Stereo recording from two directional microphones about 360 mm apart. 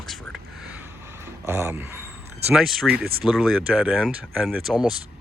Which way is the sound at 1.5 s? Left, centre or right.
Centre.